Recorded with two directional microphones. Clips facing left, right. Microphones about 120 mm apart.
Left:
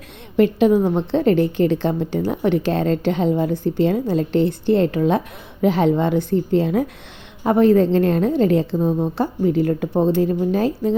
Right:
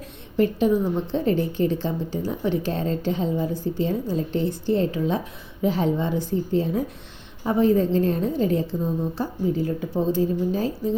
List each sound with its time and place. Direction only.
0.3 s a woman's voice: 80° left